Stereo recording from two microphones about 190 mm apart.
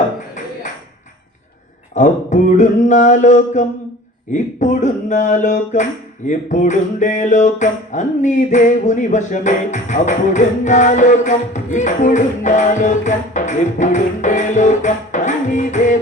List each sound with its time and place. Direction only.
2.0 s speech: 40° left (ahead or behind)